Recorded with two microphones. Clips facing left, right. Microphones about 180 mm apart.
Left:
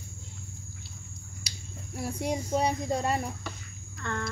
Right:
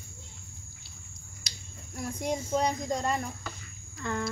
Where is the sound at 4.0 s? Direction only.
10° right (ahead or behind).